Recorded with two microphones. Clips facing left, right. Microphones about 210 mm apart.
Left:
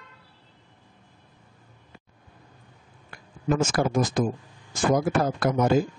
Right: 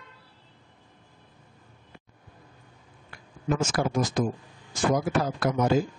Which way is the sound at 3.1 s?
50° left (ahead or behind).